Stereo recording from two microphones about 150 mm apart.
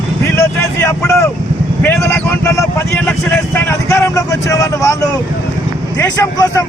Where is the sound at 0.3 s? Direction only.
15° left (ahead or behind).